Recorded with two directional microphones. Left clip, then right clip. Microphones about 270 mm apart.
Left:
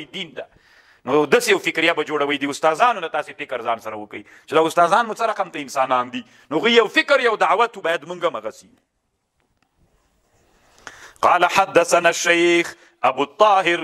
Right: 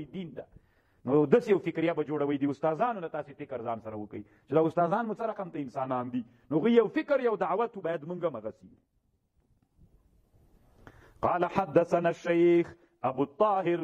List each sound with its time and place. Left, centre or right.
0.1 s a man's voice: centre
10.8 s a sound: centre
11.3 s a man's voice: centre